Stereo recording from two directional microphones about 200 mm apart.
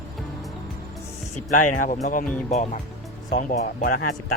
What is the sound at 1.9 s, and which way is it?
Speech, 40° left (ahead or behind).